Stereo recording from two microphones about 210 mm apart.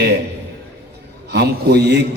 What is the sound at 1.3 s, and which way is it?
Speech, 50° right (ahead or behind).